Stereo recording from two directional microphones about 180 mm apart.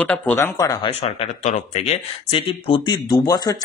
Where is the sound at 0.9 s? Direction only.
35° left (ahead or behind).